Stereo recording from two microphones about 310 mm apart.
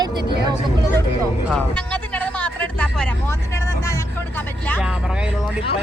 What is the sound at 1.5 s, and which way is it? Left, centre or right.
Speech, centre.